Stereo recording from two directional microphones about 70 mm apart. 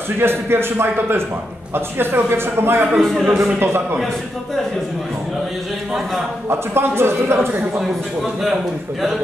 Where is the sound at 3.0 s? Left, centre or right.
Centre.